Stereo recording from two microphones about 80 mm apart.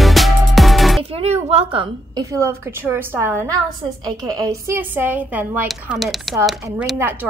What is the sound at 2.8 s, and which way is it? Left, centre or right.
Speech, right.